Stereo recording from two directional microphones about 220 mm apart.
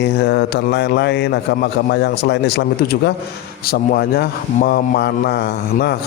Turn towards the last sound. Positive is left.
turn(degrees=45)  # may be behind; listen again after turning